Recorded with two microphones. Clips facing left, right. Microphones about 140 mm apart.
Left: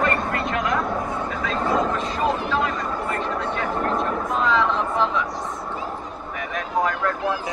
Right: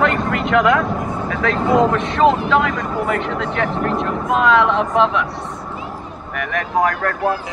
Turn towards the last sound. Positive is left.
turn(degrees=-70)  # may be behind; listen again after turning